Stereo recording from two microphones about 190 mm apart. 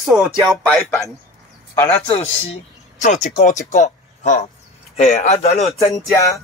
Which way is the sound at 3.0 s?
40° left (ahead or behind).